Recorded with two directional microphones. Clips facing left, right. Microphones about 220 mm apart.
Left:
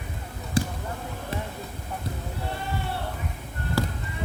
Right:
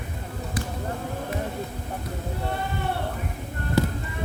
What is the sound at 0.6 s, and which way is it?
Basketball bounce, 30° left (ahead or behind).